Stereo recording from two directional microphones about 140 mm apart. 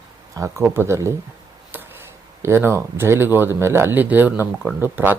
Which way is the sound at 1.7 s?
15° right (ahead or behind).